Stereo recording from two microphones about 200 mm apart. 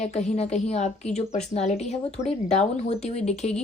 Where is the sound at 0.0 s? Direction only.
35° left (ahead or behind).